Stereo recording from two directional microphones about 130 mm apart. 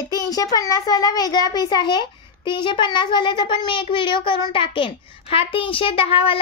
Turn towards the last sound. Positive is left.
turn(degrees=45)  # may be behind; listen again after turning